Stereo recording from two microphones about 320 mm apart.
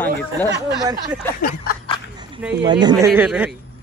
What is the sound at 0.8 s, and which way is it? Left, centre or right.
Speech, centre.